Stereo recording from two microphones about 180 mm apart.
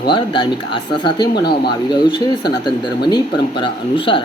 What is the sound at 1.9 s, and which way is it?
Speech, 25° left (ahead or behind).